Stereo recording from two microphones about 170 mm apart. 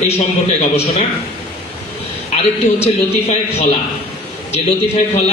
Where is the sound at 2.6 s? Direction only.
40° left (ahead or behind).